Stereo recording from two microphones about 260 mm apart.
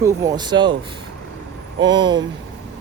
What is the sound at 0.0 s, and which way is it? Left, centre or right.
Speech, centre.